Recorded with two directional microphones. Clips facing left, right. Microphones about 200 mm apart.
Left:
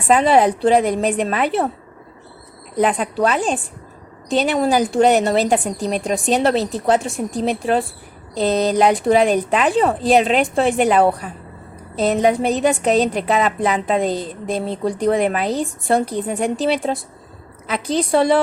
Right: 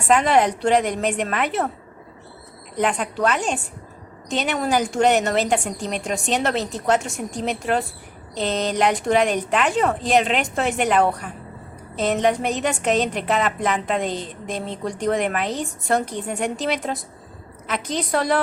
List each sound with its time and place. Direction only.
0.2 s a woman's voice: 35° left (ahead or behind)
2.7 s a woman's voice: 35° left (ahead or behind)